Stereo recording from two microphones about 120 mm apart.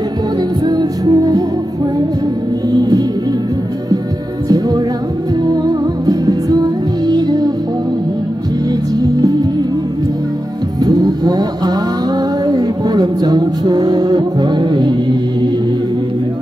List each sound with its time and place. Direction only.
0.7 s music: 35° right (ahead or behind)
2.7 s music: 35° right (ahead or behind)
4.5 s music: 35° right (ahead or behind)
6.0 s music: 30° right (ahead or behind)
9.0 s music: 30° right (ahead or behind)
10.8 s vehicle: 35° right (ahead or behind)
12.4 s music: 35° right (ahead or behind)